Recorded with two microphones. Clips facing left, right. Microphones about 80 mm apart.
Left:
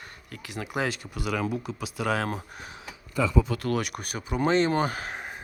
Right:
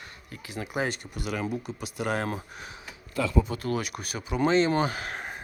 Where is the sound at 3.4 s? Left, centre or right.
Left.